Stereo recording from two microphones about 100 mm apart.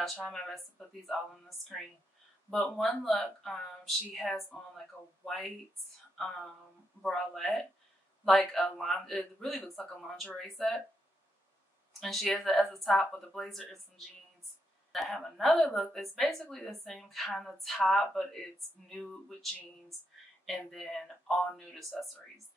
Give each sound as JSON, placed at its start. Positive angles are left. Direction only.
{"t": 0.0, "sound": "a woman's voice", "side_deg": 5}
{"t": 2.5, "sound": "a woman's voice", "side_deg": 5}
{"t": 7.0, "sound": "a woman's voice", "side_deg": 5}
{"t": 12.0, "sound": "a woman's voice", "side_deg": 5}